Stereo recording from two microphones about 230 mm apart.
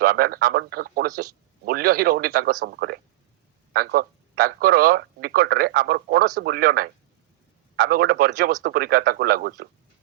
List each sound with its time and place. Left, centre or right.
0.0 s a man's voice: right